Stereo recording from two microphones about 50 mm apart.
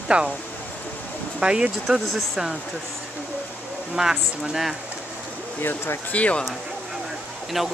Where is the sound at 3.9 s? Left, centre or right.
Centre.